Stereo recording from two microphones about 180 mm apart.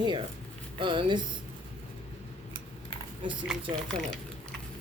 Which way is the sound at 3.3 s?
5° right (ahead or behind).